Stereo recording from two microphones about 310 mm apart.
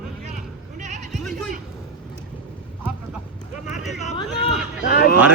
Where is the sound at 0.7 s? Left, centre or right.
Right.